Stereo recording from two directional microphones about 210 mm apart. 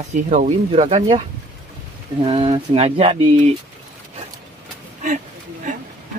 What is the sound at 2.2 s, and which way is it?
Speech, 25° right (ahead or behind).